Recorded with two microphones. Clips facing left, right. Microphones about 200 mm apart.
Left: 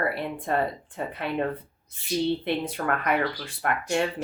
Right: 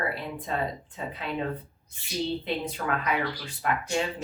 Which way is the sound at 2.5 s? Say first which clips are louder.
Left 3 dB; 55° left (ahead or behind).